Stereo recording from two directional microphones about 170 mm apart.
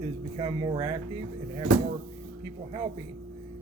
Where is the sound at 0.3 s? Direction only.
25° right (ahead or behind).